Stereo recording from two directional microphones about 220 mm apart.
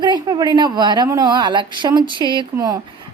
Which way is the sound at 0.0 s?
20° right (ahead or behind).